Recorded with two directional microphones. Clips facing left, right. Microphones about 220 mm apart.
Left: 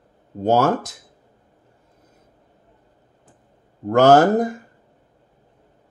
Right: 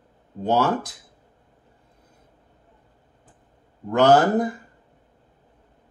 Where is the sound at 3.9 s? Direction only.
45° left (ahead or behind).